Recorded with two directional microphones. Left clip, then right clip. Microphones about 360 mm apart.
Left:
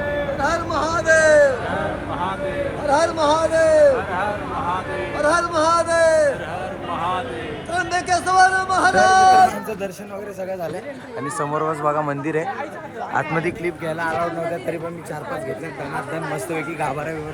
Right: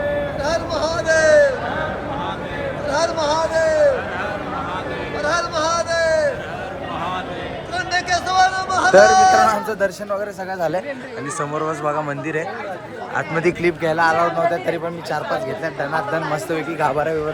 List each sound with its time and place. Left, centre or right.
0.7 s music: left
2.9 s a sound: left
5.1 s music: centre
7.7 s a sound: centre
9.5 s speech: centre
11.3 s speech: centre
13.6 s a man's voice: centre
16.1 s speech: centre